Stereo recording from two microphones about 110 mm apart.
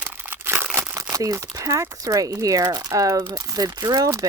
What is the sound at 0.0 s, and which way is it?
Crumpling, 15° right (ahead or behind).